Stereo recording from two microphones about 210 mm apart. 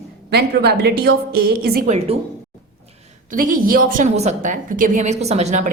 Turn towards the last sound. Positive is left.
turn(degrees=-30)  # may be behind; listen again after turning